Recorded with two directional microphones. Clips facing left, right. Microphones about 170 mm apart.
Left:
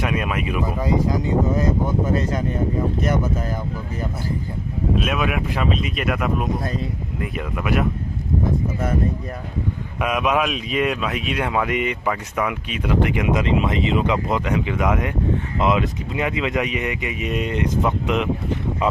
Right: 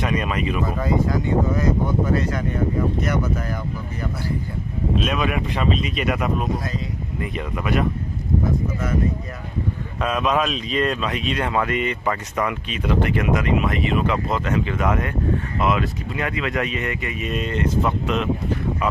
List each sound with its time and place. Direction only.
0.0 s speech: 5° left (ahead or behind)
4.9 s speech: 5° left (ahead or behind)
10.0 s speech: 10° left (ahead or behind)